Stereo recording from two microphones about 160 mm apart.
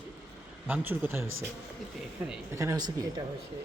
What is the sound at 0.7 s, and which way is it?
Speech, 15° right (ahead or behind).